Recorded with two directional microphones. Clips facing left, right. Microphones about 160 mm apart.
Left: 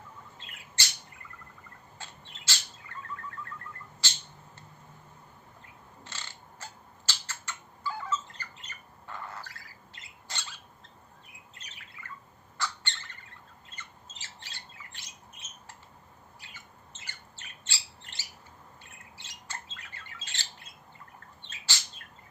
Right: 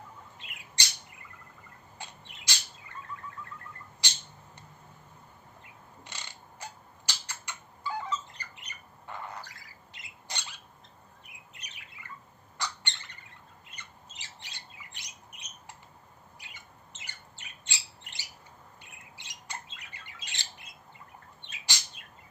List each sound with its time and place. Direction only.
0.3 s squawk: 15° right (ahead or behind)
2.0 s bird: 15° right (ahead or behind)
4.0 s a sound: 15° right (ahead or behind)
6.1 s a sound: 15° right (ahead or behind)
11.5 s squawk: 15° right (ahead or behind)
18.8 s bird: 15° right (ahead or behind)